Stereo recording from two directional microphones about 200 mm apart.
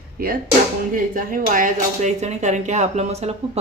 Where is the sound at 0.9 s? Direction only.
45° right (ahead or behind).